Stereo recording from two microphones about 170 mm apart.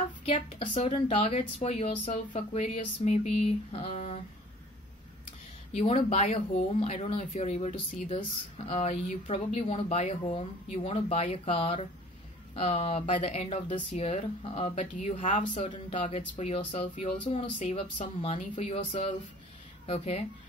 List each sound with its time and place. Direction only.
0.2 s a woman's voice: 35° left (ahead or behind)
5.7 s a woman's voice: 40° left (ahead or behind)
16.5 s a woman's voice: 30° left (ahead or behind)